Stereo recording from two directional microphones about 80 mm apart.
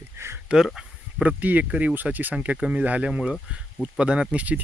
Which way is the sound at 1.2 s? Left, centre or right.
Centre.